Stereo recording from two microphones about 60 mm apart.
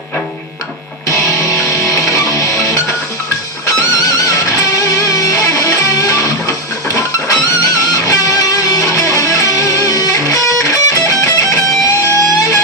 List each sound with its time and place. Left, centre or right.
1.0 s music: left